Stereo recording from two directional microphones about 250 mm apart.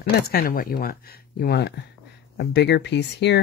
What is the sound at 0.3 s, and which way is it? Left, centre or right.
Speech, left.